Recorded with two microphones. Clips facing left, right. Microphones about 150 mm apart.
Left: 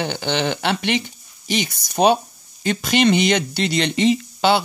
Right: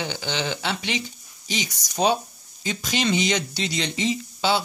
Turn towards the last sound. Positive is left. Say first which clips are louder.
# left 6 dB
turn(degrees=65)  # may be behind; listen again after turning